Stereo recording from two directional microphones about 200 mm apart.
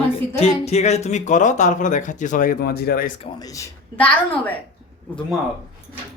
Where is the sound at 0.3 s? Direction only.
30° left (ahead or behind); by 3.1 s 50° left (ahead or behind).